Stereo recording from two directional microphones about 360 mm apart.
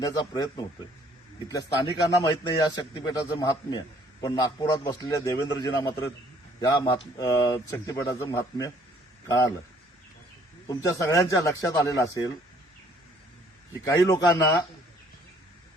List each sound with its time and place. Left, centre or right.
0.0 s speech: centre
10.7 s speech: centre
13.8 s speech: centre